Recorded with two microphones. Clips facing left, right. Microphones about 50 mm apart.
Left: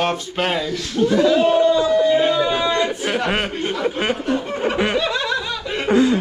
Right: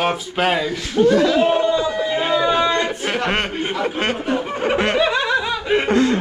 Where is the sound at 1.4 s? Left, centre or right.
Centre.